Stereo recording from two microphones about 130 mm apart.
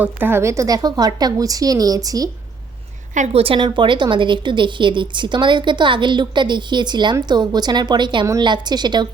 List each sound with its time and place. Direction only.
0.0 s a woman's voice: 15° right (ahead or behind)
3.3 s speech: 45° right (ahead or behind)